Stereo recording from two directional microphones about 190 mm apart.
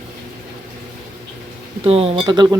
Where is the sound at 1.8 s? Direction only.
30° right (ahead or behind).